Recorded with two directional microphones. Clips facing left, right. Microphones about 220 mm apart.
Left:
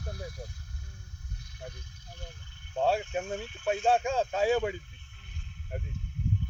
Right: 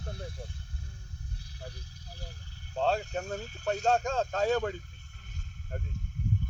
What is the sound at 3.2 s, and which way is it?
Speech, 40° right (ahead or behind).